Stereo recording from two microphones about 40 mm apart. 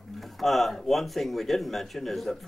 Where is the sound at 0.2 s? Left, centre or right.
Centre.